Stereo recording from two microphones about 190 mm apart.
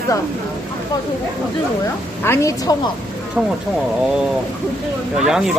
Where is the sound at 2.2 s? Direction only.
15° left (ahead or behind).